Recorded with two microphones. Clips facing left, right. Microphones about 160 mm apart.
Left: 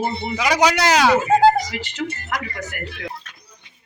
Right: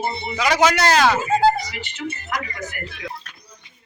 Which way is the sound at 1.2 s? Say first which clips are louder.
Left 3 dB; 75° left (ahead or behind).